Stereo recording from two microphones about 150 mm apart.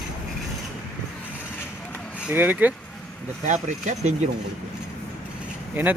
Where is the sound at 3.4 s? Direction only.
55° right (ahead or behind).